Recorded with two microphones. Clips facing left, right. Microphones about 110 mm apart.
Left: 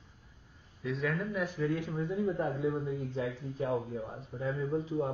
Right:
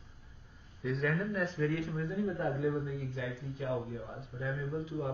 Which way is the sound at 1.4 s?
15° left (ahead or behind).